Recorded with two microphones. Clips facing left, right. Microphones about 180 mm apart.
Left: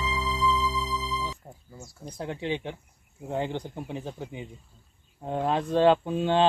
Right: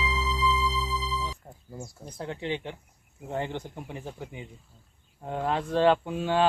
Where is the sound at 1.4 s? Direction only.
5° left (ahead or behind).